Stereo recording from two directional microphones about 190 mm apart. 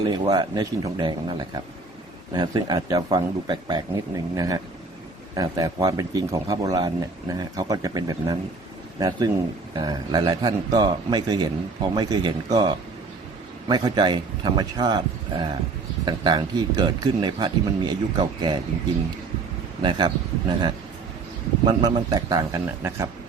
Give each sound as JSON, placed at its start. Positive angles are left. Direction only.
{"t": 0.0, "sound": "a man's voice", "side_deg": -20}
{"t": 19.8, "sound": "a man's voice", "side_deg": -25}
{"t": 21.7, "sound": "a man's voice", "side_deg": -20}